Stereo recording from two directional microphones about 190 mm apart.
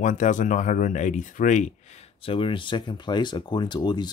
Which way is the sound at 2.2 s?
30° left (ahead or behind).